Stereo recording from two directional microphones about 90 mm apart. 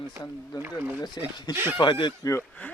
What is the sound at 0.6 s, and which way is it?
Speech, 25° right (ahead or behind).